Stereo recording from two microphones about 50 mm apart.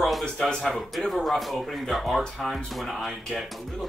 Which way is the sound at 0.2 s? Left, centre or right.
Centre.